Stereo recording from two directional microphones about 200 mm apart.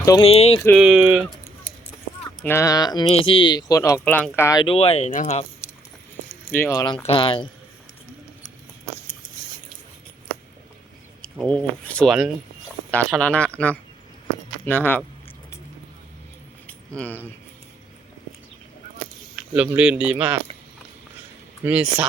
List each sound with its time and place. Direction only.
0.0 s a sound: 15° left (ahead or behind)
0.3 s speech: 30° left (ahead or behind)
0.8 s speech: 5° right (ahead or behind)
2.4 s speech: 15° left (ahead or behind)
4.6 s speech: 30° left (ahead or behind)
6.5 s speech: 10° left (ahead or behind)
11.2 s speech: 5° left (ahead or behind)
16.6 s a sound: 5° left (ahead or behind)
19.4 s speech: 5° right (ahead or behind)
21.6 s speech: 5° right (ahead or behind)